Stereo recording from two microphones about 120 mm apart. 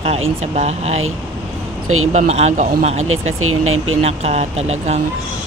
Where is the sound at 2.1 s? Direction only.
65° right (ahead or behind).